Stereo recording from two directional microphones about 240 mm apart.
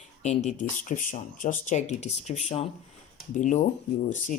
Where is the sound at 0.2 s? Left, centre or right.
Left.